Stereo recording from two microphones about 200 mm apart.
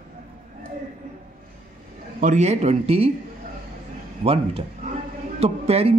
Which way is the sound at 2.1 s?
40° right (ahead or behind).